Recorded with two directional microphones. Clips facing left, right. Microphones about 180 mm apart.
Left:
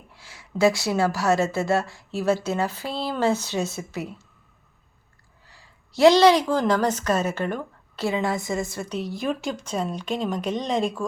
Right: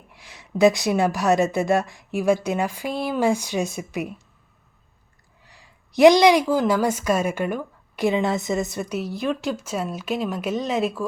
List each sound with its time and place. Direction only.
0.1 s a woman's voice: 15° right (ahead or behind)
5.5 s a woman's voice: 15° right (ahead or behind)
8.9 s speech: 5° right (ahead or behind)